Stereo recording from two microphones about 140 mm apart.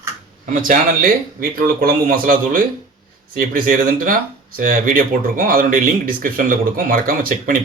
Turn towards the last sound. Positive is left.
turn(degrees=-85)